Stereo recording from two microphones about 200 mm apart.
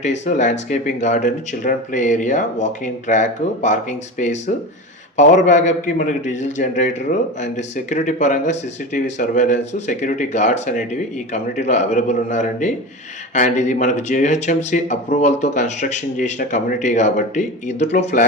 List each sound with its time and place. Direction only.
0.3 s speech: 35° left (ahead or behind)